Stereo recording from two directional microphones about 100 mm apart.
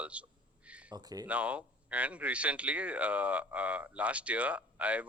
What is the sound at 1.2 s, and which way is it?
Speech, 15° right (ahead or behind).